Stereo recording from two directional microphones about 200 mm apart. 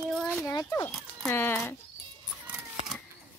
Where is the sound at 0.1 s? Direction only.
5° left (ahead or behind).